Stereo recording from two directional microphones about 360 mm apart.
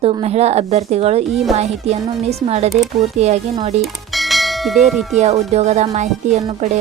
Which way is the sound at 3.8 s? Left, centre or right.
Centre.